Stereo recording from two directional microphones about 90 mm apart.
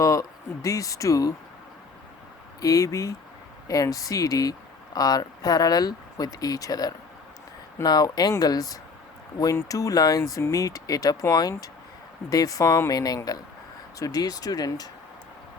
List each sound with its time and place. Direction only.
0.0 s speech: 40° left (ahead or behind)
2.6 s speech: 40° left (ahead or behind)